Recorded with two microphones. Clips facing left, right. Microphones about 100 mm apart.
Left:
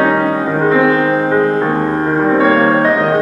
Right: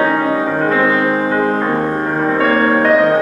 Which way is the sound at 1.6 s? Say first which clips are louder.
Left 2 dB; 20° left (ahead or behind).